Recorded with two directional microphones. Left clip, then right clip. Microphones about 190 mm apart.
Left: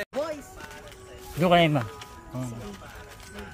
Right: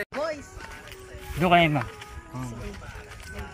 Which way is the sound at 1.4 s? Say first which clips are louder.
Right 1 dB; 50° left (ahead or behind).